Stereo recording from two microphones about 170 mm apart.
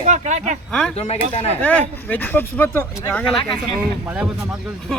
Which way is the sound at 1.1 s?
40° left (ahead or behind).